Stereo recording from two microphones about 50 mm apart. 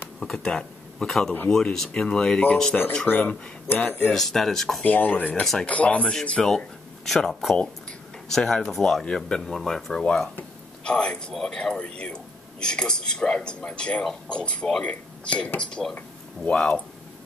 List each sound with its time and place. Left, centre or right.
0.2 s speech: centre
3.1 s speech: left
4.1 s speech: centre
4.8 s speech: left
5.3 s speech: centre
5.7 s speech: left
6.4 s speech: centre
10.8 s a man's voice: centre